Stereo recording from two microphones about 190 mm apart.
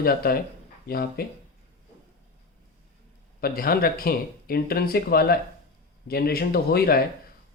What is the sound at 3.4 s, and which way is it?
Speech, 50° left (ahead or behind).